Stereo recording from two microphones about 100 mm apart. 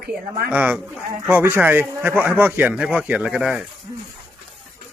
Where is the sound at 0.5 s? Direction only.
15° right (ahead or behind).